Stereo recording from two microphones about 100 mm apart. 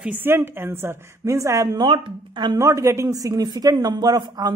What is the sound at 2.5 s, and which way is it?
Speech, 30° right (ahead or behind).